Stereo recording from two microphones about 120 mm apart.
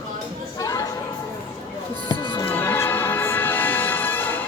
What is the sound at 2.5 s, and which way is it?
Music, 15° left (ahead or behind).